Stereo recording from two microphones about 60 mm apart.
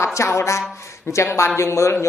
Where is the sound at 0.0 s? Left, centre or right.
Left.